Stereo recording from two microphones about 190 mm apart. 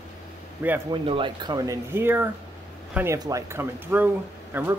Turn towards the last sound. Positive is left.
turn(degrees=-10)  # may be behind; listen again after turning